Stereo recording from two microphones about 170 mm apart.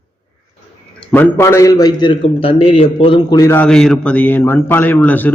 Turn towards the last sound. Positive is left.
turn(degrees=10)  # may be behind; listen again after turning